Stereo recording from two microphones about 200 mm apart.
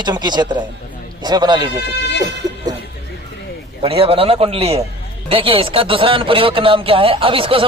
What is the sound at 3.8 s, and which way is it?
Speech, 30° right (ahead or behind).